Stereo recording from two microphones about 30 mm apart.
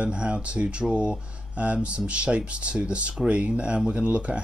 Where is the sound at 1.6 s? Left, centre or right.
Right.